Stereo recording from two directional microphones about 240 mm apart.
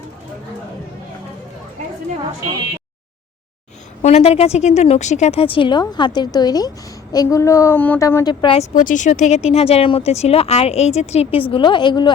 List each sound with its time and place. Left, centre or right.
4.0 s speech: left
8.7 s speech: left